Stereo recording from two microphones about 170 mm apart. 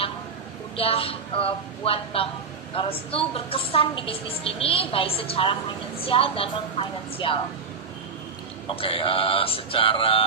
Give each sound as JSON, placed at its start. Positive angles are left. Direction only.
{"t": 0.7, "sound": "a woman's voice", "side_deg": 35}
{"t": 8.8, "sound": "a woman's voice", "side_deg": 35}